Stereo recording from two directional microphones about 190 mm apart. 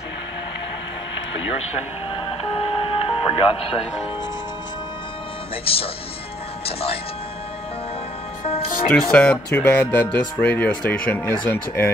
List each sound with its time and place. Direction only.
2.4 s music: 30° left (ahead or behind)
6.6 s speech: 30° left (ahead or behind)
8.9 s speech: 5° left (ahead or behind)